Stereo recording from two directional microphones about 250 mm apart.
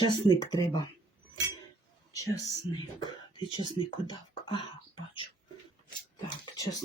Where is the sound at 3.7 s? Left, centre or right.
Centre.